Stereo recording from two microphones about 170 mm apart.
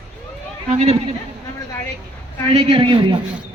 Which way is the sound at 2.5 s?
30° right (ahead or behind).